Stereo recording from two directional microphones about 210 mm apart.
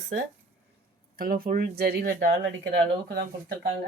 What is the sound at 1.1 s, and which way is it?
Speech, 45° right (ahead or behind).